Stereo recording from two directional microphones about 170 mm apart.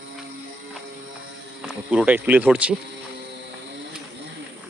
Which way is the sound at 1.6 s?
5° right (ahead or behind).